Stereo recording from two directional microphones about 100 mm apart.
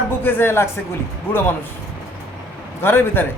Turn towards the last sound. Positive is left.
turn(degrees=20)  # may be behind; listen again after turning